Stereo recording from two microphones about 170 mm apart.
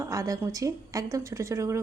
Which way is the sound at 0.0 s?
20° right (ahead or behind).